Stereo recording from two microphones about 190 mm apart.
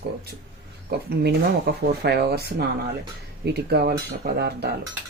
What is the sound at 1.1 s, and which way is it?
Speech, 60° right (ahead or behind).